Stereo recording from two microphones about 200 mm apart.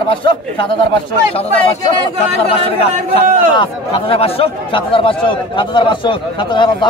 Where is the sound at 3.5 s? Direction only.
25° left (ahead or behind).